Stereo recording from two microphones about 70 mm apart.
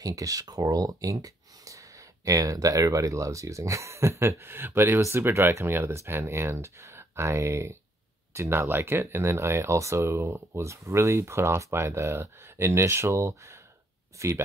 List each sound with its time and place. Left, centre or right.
0.0 s speech: right